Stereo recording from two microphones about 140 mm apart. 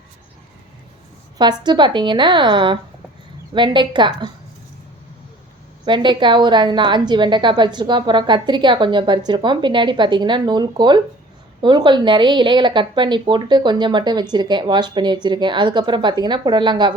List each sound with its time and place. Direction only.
1.4 s a woman's voice: 30° right (ahead or behind)
5.8 s a woman's voice: 35° right (ahead or behind)